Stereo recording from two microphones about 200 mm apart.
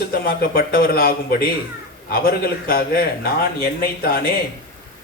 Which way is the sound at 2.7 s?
45° left (ahead or behind).